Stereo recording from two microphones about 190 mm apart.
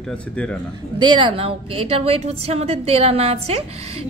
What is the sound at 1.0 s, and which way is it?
A woman's voice, 25° right (ahead or behind).